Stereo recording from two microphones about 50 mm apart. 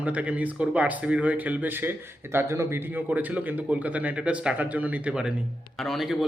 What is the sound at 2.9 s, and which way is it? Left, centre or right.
Speech, right.